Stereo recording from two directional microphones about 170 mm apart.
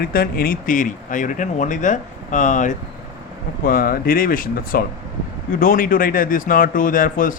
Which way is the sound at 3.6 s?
55° left (ahead or behind).